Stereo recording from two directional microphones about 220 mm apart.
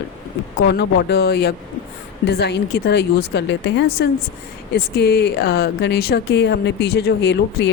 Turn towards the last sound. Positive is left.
turn(degrees=50)  # may be behind; listen again after turning